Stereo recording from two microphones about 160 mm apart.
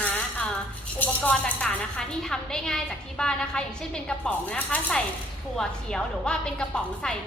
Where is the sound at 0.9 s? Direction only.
10° left (ahead or behind).